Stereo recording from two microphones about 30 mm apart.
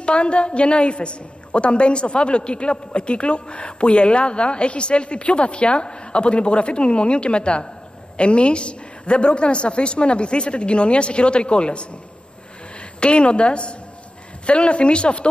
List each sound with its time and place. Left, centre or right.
0.0 s a woman's voice: left
13.0 s a woman's voice: left